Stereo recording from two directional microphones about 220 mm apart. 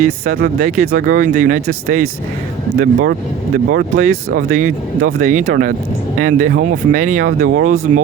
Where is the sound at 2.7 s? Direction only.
40° right (ahead or behind).